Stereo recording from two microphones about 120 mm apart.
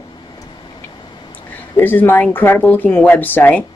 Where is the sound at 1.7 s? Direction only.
15° left (ahead or behind).